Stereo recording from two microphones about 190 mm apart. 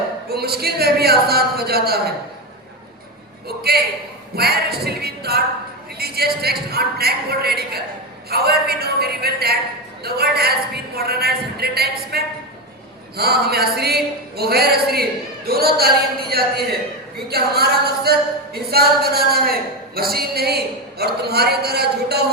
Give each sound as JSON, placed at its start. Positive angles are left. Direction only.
{"t": 0.3, "sound": "speech", "side_deg": -55}
{"t": 3.6, "sound": "a man's voice", "side_deg": -55}